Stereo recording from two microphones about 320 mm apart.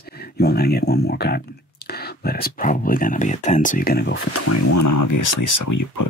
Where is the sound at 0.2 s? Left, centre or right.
Left.